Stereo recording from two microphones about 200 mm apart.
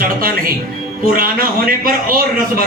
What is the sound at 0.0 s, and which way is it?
A man's voice, 45° right (ahead or behind).